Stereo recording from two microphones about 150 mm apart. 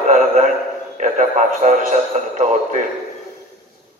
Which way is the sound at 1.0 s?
55° right (ahead or behind).